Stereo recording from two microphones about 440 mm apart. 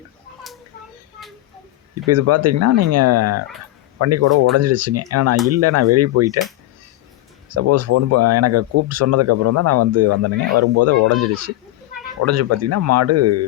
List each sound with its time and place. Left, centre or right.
2.0 s speech: right
7.5 s speech: right